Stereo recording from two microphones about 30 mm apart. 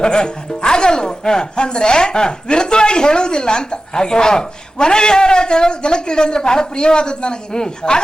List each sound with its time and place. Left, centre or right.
0.0 s speech: left